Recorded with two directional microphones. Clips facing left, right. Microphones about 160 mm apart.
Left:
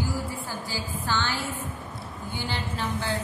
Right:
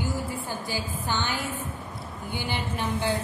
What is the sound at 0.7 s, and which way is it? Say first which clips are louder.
A woman's voice: left 1 dB; 20° right (ahead or behind).